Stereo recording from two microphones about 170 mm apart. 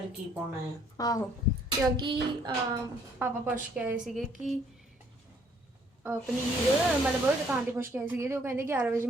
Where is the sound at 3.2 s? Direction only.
10° right (ahead or behind).